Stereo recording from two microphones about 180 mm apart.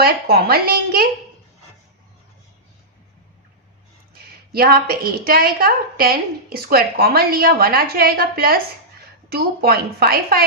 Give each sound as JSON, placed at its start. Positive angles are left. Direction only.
{"t": 0.0, "sound": "a woman's voice", "side_deg": -60}
{"t": 4.5, "sound": "a woman's voice", "side_deg": -55}